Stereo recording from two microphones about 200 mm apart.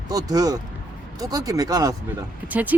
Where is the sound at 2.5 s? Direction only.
10° right (ahead or behind).